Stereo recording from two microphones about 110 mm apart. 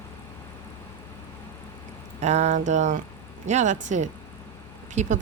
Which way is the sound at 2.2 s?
90° right.